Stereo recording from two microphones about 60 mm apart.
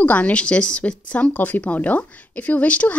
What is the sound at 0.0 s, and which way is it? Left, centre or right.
A woman's voice, left.